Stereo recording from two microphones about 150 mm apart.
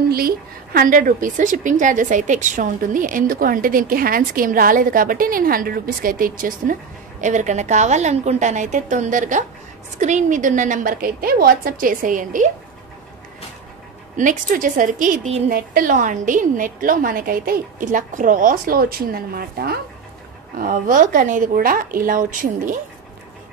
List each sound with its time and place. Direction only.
0.7 s a woman's voice: 65° right (ahead or behind)
14.1 s a woman's voice: 60° right (ahead or behind)
15.5 s a woman's voice: 70° right (ahead or behind); by 19.8 s 85° right
20.5 s a woman's voice: 65° right (ahead or behind)